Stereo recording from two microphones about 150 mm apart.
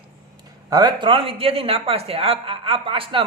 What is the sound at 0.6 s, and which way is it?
Speech, 25° right (ahead or behind).